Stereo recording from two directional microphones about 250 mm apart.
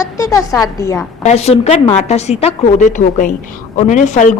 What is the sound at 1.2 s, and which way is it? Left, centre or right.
A woman's voice, left.